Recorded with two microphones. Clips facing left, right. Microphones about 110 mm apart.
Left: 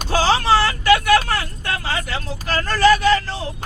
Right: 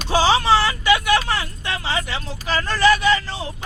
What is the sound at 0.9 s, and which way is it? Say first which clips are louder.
Vehicle: left 4 dB; 45° left (ahead or behind).